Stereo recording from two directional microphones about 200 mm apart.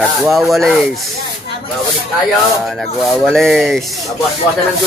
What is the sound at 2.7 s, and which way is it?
Speech, centre (ahead or behind).